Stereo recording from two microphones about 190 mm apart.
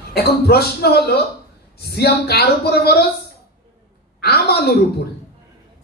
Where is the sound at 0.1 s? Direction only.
55° left (ahead or behind).